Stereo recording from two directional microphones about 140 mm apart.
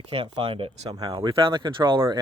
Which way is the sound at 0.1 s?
40° right (ahead or behind).